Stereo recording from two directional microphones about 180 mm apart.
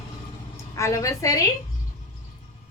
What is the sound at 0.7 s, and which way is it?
Speech, 15° left (ahead or behind).